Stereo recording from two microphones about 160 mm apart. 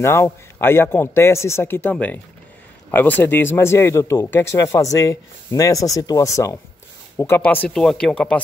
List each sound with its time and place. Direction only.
0.0 s speech: 15° left (ahead or behind)